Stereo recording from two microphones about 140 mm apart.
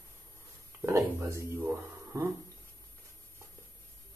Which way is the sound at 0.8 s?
20° right (ahead or behind).